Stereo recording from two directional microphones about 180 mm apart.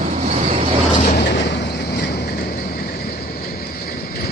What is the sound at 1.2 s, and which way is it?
Vehicle, 70° left (ahead or behind).